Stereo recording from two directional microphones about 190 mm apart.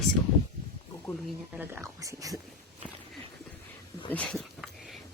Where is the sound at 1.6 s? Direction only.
15° right (ahead or behind).